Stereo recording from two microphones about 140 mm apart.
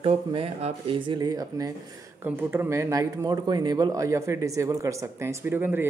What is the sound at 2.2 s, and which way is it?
Speech, 15° right (ahead or behind).